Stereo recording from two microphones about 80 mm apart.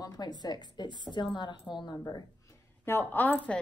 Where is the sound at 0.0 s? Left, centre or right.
Left.